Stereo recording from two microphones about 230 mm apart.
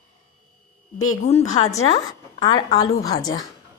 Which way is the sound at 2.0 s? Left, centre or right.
Centre.